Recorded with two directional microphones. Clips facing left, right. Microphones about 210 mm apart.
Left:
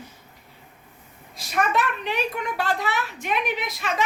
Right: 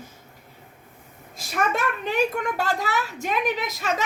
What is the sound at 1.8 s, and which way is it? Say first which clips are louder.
A child's voice: right 2 dB; 45° right (ahead or behind).